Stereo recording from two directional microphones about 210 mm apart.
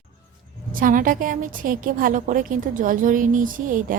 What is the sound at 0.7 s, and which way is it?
A woman's voice, 40° right (ahead or behind).